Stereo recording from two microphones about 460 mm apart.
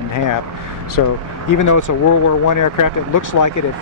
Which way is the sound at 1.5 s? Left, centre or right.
Left.